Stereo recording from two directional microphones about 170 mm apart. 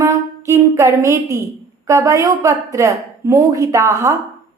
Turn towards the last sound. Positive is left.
turn(degrees=-15)  # may be behind; listen again after turning